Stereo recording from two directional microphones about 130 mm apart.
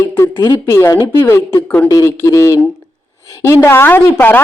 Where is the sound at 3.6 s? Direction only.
20° left (ahead or behind).